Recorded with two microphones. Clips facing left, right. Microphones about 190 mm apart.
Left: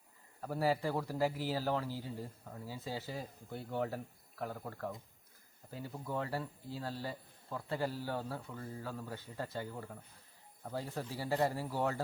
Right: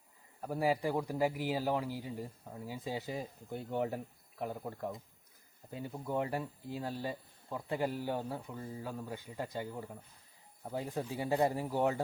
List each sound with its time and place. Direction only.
0.4 s speech: 15° right (ahead or behind)